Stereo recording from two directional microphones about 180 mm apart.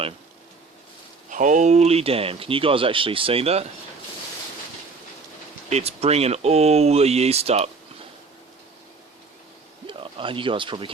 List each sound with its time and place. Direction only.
1.3 s speech: 45° right (ahead or behind)
5.6 s speech: 35° right (ahead or behind)
9.8 s speech: 30° right (ahead or behind)